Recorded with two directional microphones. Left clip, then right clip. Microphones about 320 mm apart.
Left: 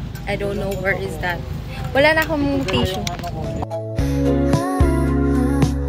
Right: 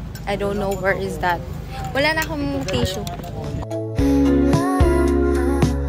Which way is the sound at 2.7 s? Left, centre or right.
Centre.